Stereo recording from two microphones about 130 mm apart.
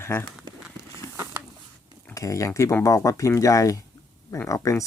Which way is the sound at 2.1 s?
25° left (ahead or behind).